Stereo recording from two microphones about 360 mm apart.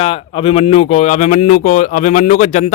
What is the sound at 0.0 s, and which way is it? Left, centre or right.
Speech, centre.